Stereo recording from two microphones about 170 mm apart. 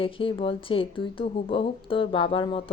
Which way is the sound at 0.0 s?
30° left (ahead or behind).